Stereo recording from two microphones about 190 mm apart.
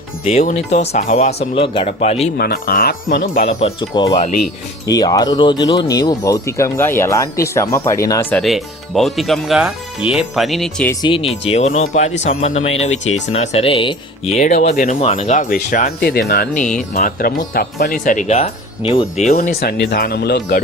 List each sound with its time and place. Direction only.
0.3 s speech: 40° left (ahead or behind)
2.4 s speech: 50° left (ahead or behind)
3.4 s speech: 30° left (ahead or behind); by 10.9 s 5° left (ahead or behind)
11.0 s speech: 30° left (ahead or behind)
19.4 s speech: 55° left (ahead or behind)